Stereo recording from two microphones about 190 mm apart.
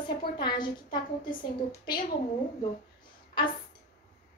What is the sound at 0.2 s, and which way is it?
Speech, 25° left (ahead or behind).